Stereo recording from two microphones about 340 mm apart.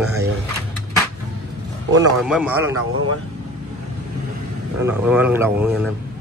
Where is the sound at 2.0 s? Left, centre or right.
Centre.